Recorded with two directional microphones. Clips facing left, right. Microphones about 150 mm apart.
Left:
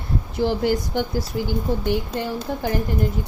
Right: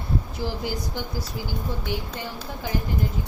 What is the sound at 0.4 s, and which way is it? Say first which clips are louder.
A woman's voice: left 9 dB; 60° left (ahead or behind).